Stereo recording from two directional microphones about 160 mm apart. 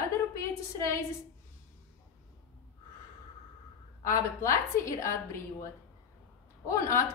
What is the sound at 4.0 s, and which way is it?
A woman's voice, 20° left (ahead or behind).